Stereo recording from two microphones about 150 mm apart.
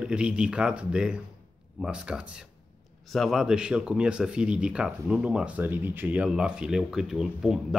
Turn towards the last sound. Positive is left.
turn(degrees=-5)  # may be behind; listen again after turning